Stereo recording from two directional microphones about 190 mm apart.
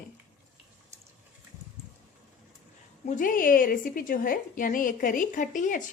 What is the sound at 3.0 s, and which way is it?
A woman's voice, 45° left (ahead or behind).